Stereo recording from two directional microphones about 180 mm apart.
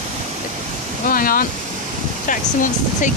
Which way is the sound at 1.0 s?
50° left (ahead or behind).